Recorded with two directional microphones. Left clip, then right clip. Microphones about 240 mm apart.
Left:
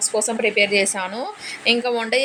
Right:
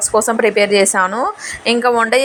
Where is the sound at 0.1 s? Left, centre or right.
Centre.